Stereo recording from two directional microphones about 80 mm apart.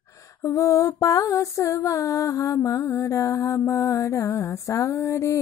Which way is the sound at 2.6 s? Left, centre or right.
Left.